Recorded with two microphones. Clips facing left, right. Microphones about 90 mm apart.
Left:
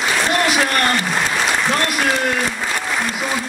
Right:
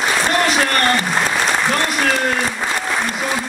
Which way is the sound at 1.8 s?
5° left (ahead or behind).